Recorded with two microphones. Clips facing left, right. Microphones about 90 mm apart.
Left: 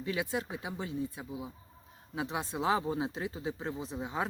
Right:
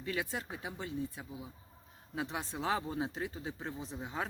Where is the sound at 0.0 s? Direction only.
10° left (ahead or behind).